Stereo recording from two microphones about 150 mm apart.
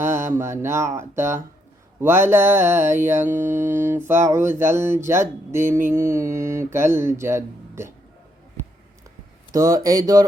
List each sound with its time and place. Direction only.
0.0 s mantra: 15° right (ahead or behind)
9.5 s speech: 25° right (ahead or behind)